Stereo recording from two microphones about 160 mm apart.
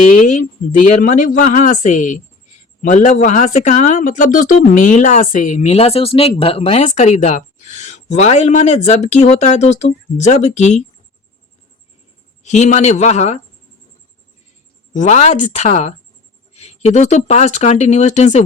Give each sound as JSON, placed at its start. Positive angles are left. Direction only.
{"t": 0.1, "sound": "speech", "side_deg": 50}
{"t": 12.4, "sound": "speech", "side_deg": 45}
{"t": 14.9, "sound": "speech", "side_deg": 45}